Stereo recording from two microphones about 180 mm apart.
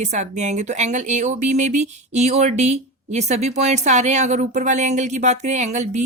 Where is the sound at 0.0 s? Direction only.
40° right (ahead or behind).